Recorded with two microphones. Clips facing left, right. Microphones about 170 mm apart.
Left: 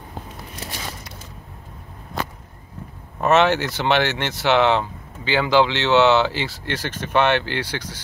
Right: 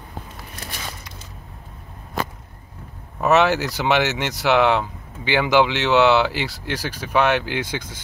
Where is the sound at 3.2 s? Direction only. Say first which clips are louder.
Even; 5° right (ahead or behind).